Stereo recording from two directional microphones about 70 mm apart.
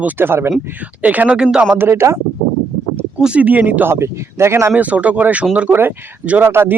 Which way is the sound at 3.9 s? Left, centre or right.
Right.